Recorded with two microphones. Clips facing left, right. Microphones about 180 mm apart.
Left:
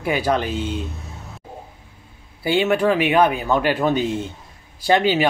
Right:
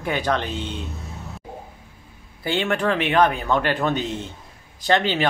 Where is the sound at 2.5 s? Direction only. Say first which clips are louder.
Left 4 dB; 10° left (ahead or behind).